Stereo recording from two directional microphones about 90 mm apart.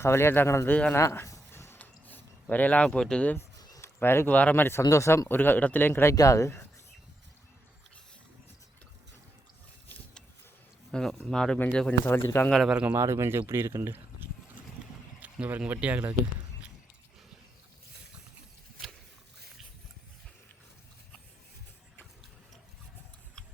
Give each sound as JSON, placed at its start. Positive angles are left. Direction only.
{"t": 0.0, "sound": "speech", "side_deg": 30}
{"t": 0.9, "sound": "a sound", "side_deg": 30}
{"t": 3.8, "sound": "speech", "side_deg": 25}
{"t": 4.8, "sound": "speech", "side_deg": 35}
{"t": 6.1, "sound": "speech", "side_deg": 35}
{"t": 10.9, "sound": "speech", "side_deg": 5}
{"t": 12.0, "sound": "speech", "side_deg": 25}
{"t": 12.6, "sound": "speech", "side_deg": -15}
{"t": 13.0, "sound": "speech", "side_deg": -30}
{"t": 23.4, "sound": "tick-tock", "side_deg": 10}